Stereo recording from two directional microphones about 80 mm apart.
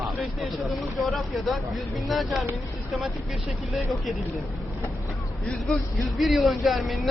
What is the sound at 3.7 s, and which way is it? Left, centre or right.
Speech, centre.